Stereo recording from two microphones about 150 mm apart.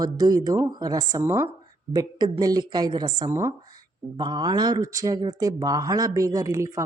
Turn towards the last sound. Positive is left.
turn(degrees=-20)  # may be behind; listen again after turning